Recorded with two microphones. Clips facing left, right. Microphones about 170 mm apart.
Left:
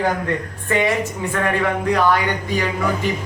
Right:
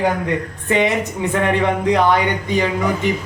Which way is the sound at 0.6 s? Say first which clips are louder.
Right 2 dB; 20° right (ahead or behind).